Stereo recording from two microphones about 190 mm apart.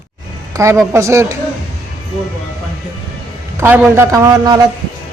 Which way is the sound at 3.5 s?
10° right (ahead or behind).